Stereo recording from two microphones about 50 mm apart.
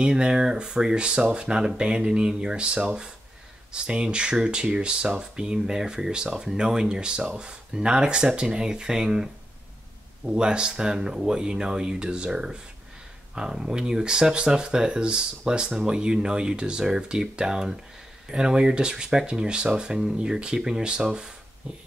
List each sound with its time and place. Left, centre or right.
0.0 s speech: centre